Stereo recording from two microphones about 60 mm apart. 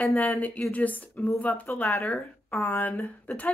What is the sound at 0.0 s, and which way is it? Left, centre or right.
A woman's voice, left.